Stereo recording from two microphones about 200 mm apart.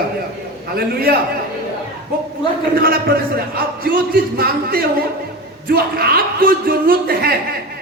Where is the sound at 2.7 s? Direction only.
45° right (ahead or behind).